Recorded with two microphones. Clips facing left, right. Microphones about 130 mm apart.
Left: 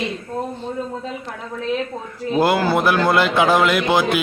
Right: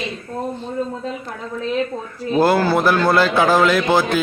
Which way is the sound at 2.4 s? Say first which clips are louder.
Right 2 dB; 15° left (ahead or behind).